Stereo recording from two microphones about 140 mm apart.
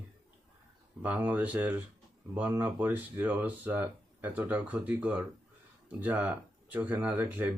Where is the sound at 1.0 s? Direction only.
10° right (ahead or behind).